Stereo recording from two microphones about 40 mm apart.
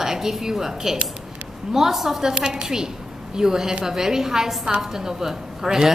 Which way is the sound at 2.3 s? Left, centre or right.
Right.